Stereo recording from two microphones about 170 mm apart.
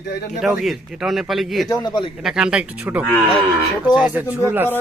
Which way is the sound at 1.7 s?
25° left (ahead or behind).